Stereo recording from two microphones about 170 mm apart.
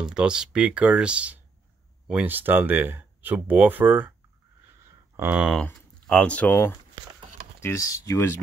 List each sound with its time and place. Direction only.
0.0 s speech: 5° right (ahead or behind)
5.1 s speech: 10° right (ahead or behind)
5.6 s speech: 5° left (ahead or behind)